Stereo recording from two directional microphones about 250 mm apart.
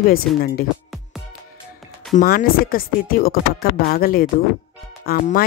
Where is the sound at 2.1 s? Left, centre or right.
Left.